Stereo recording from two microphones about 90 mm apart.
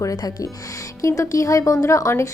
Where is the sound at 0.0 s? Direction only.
40° left (ahead or behind).